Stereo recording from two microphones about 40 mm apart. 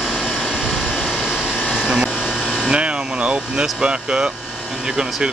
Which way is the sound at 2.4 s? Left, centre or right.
Centre.